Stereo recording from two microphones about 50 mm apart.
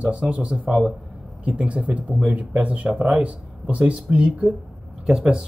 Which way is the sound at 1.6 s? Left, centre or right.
Right.